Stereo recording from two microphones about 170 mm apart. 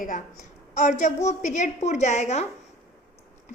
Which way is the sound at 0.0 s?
45° left (ahead or behind).